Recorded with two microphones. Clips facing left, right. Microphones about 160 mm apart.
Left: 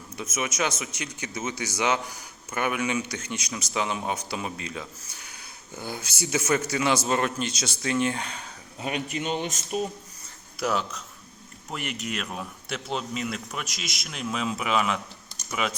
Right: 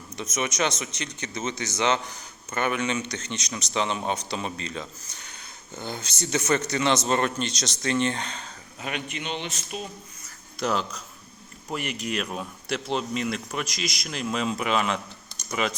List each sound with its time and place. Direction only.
0.2 s speech: 5° left (ahead or behind)
8.8 s a man's voice: 35° left (ahead or behind)
10.6 s speech: 5° left (ahead or behind)